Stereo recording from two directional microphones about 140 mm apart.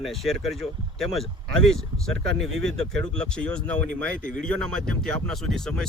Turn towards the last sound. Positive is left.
turn(degrees=5)  # may be behind; listen again after turning